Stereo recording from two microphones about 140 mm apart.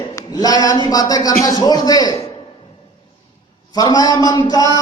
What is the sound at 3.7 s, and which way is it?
A man's voice, 25° left (ahead or behind).